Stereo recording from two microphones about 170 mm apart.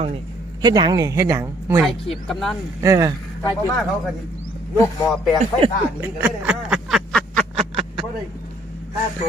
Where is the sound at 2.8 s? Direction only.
20° right (ahead or behind).